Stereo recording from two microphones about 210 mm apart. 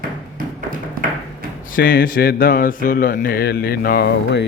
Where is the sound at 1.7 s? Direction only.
45° left (ahead or behind).